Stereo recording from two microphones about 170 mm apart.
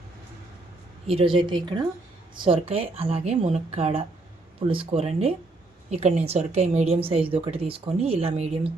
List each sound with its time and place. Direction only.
1.0 s a woman's voice: 35° right (ahead or behind)